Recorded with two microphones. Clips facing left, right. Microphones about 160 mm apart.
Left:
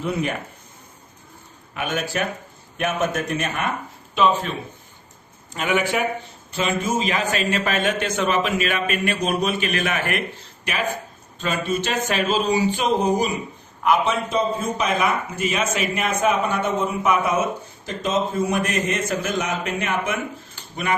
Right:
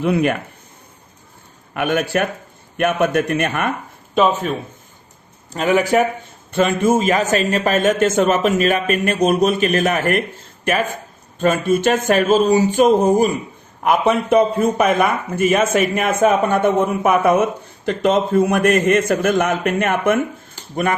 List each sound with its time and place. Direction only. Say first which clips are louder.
0.0 s a man's voice: right 7 dB; 60° right (ahead or behind)
1.7 s a man's voice: right 7 dB; 55° right (ahead or behind)
5.5 s speech: right 6 dB; 35° right (ahead or behind)
6.5 s a man's voice: right 7 dB; 50° right (ahead or behind)
11.3 s a man's voice: right 8 dB; 50° right (ahead or behind)